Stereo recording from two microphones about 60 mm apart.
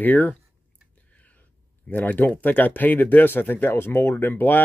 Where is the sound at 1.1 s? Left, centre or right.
Left.